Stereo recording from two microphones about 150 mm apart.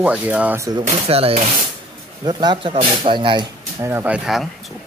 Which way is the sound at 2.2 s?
30° right (ahead or behind).